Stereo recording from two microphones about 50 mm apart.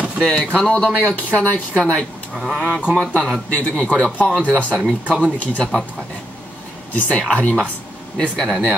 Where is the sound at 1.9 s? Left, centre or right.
Centre.